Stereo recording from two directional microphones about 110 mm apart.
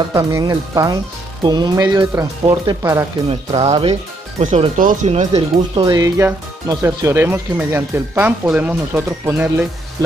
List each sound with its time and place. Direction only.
0.1 s speech: 30° right (ahead or behind)
3.3 s speech: 75° right (ahead or behind)
4.4 s speech: 90° right
5.8 s speech: 35° right (ahead or behind)